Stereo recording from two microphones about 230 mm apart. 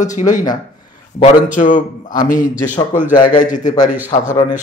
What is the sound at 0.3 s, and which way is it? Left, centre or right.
A man's voice, left.